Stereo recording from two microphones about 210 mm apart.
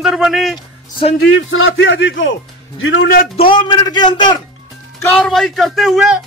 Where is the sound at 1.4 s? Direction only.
70° left (ahead or behind).